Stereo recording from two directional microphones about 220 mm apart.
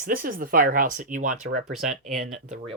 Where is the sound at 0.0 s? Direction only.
40° right (ahead or behind).